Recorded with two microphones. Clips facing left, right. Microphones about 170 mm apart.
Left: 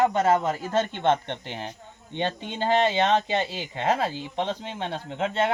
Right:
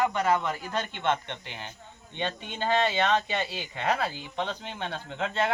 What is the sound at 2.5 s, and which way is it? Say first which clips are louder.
Speech: left 3 dB; 25° left (ahead or behind).